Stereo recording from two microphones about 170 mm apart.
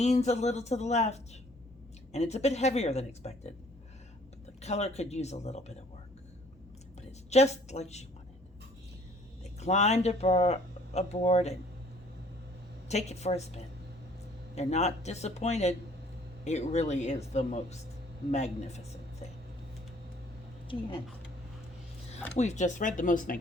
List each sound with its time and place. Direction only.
0.0 s speech: 40° left (ahead or behind)
4.6 s speech: 40° left (ahead or behind)
7.3 s speech: 40° left (ahead or behind)
9.4 s speech: 40° left (ahead or behind)
12.9 s speech: 40° left (ahead or behind)
22.4 s speech: 45° left (ahead or behind)